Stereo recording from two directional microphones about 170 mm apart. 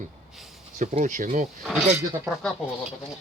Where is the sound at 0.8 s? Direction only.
45° right (ahead or behind).